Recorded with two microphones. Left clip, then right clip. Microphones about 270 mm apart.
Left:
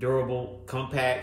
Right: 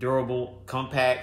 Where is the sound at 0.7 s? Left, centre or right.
Centre.